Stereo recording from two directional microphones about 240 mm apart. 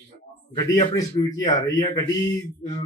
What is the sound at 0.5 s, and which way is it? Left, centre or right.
Speech, centre.